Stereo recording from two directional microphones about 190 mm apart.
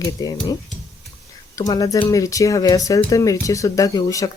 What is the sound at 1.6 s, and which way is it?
Speech, 20° left (ahead or behind).